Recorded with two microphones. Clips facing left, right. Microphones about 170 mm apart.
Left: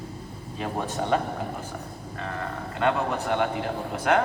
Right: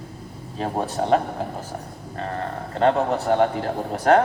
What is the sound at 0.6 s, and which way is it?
Speech, 35° right (ahead or behind).